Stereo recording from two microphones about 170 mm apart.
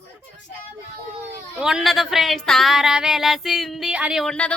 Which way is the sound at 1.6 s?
5° right (ahead or behind).